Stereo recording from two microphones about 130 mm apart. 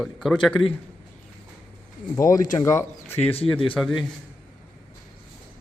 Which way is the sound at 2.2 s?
25° left (ahead or behind).